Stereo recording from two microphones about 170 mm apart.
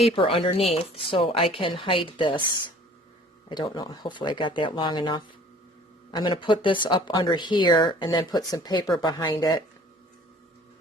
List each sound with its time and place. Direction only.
0.0 s speech: 35° left (ahead or behind)